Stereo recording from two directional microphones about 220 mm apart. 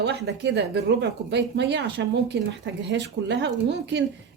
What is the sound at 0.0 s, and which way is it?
A woman's voice, 50° right (ahead or behind).